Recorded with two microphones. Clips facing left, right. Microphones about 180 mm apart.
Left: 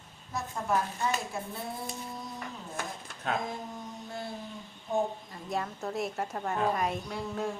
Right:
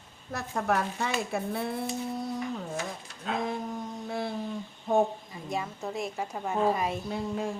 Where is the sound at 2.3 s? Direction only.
55° left (ahead or behind).